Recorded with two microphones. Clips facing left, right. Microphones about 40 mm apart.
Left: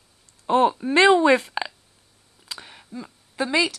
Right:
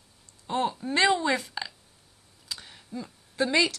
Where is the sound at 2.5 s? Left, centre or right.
Left.